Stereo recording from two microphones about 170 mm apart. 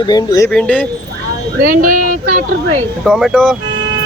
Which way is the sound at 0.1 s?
20° left (ahead or behind).